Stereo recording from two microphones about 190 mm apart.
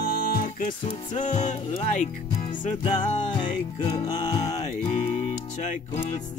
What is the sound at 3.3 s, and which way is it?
Music, 25° left (ahead or behind).